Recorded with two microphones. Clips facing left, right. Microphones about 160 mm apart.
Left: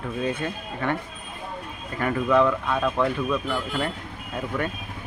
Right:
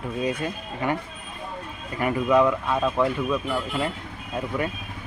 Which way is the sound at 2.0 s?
10° right (ahead or behind).